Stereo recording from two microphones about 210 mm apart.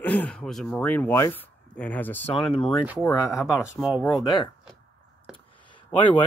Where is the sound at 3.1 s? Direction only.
15° left (ahead or behind).